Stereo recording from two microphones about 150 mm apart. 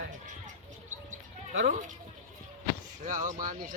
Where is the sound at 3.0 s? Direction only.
60° right (ahead or behind).